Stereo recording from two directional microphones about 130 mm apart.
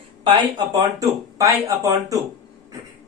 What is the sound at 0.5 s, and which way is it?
Speech, 30° right (ahead or behind).